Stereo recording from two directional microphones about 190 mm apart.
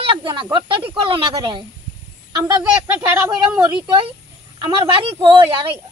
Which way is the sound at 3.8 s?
25° right (ahead or behind).